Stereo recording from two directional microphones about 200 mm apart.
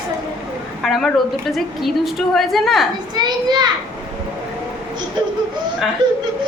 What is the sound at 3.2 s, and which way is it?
Speech, 20° right (ahead or behind).